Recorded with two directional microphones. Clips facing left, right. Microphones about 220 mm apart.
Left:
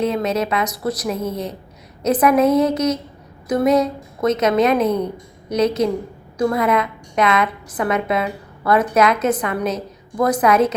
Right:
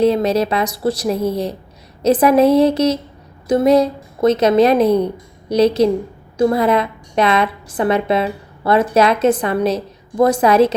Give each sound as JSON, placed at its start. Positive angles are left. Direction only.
{"t": 0.0, "sound": "a woman's voice", "side_deg": -35}